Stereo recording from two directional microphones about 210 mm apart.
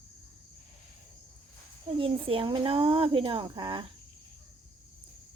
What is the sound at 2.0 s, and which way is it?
Speech, 25° right (ahead or behind).